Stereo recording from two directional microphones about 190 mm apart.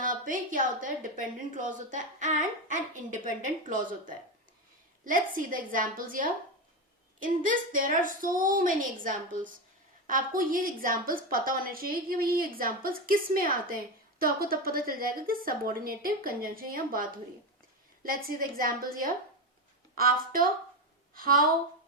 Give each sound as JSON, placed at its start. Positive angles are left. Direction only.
{"t": 0.0, "sound": "a woman's voice", "side_deg": -45}
{"t": 5.0, "sound": "a woman's voice", "side_deg": -45}